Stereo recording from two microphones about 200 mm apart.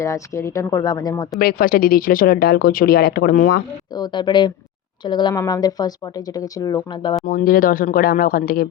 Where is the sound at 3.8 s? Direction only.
20° left (ahead or behind).